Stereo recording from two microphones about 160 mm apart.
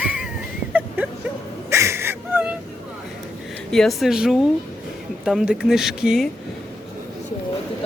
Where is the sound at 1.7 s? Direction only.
15° right (ahead or behind).